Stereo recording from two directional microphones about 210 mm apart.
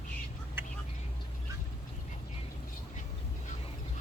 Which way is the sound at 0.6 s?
10° right (ahead or behind).